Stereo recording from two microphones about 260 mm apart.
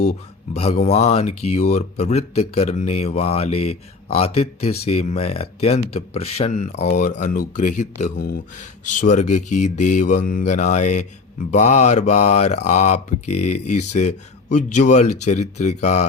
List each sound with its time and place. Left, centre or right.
0.0 s mantra: left